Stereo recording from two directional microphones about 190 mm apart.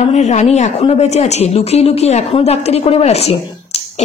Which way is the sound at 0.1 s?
40° left (ahead or behind).